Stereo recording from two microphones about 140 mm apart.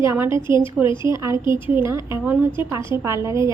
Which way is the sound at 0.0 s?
20° right (ahead or behind).